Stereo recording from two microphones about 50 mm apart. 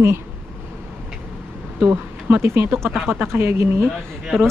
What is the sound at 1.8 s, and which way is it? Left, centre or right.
Speech, right.